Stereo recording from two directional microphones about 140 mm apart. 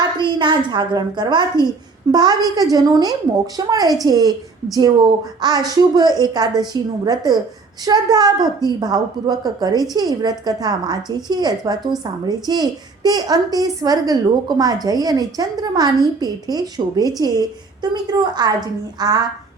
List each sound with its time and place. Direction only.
0.2 s a child's voice: 35° right (ahead or behind)